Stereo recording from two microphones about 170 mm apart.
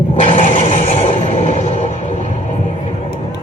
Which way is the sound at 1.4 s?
40° left (ahead or behind).